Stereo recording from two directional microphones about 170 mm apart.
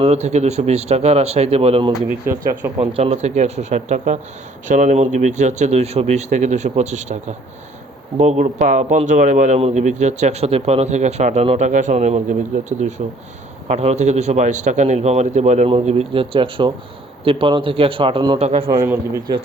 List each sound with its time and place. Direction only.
0.0 s a man's voice: 40° right (ahead or behind)
2.2 s speech: 15° right (ahead or behind)
2.7 s a man's voice: 35° right (ahead or behind)
18.7 s a man's voice: 20° right (ahead or behind)